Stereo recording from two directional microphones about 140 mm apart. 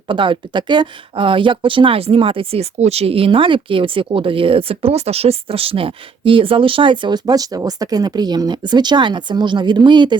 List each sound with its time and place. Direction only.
0.1 s speech: 35° right (ahead or behind)